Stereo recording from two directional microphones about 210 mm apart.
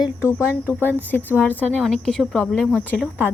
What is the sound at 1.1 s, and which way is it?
Speech, 10° left (ahead or behind).